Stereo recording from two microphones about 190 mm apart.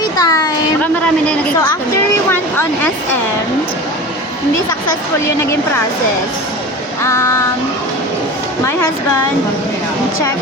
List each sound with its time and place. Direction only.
0.2 s a sound: 20° left (ahead or behind)
1.0 s speech: 5° left (ahead or behind)
7.0 s child singing: 15° left (ahead or behind)